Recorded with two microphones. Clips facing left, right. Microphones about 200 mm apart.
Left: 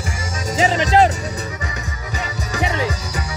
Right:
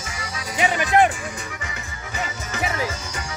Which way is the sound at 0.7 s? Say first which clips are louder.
Left 2 dB; 25° left (ahead or behind).